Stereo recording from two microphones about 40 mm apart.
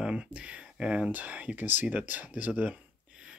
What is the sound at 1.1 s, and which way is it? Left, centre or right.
Speech, right.